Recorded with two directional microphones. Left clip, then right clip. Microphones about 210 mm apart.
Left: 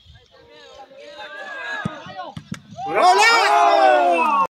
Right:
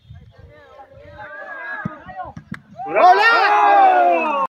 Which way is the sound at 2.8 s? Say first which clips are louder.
Right 3 dB; centre (ahead or behind).